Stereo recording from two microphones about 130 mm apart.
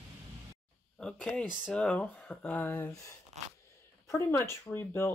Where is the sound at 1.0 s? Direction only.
10° left (ahead or behind).